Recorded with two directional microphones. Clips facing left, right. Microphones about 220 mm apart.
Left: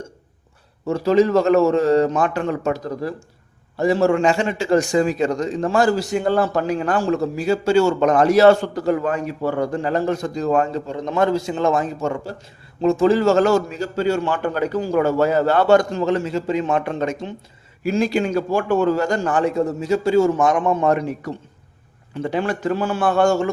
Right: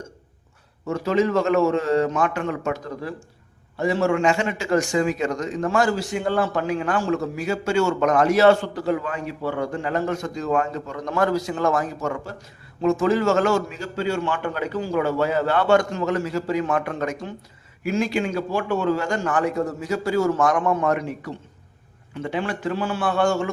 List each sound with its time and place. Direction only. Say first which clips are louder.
0.9 s a man's voice: left 5 dB; 35° left (ahead or behind)